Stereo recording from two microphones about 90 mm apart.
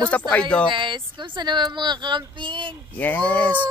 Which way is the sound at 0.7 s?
60° right (ahead or behind).